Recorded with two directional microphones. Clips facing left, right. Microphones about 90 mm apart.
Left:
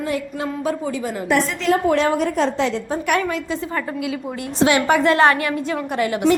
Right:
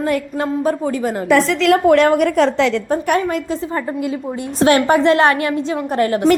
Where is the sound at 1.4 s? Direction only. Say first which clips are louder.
Right 5 dB; 80° right.